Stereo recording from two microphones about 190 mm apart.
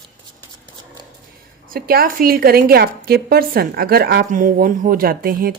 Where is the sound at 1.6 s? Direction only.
50° right (ahead or behind).